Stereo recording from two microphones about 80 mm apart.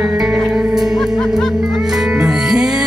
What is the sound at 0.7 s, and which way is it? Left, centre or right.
Music, centre.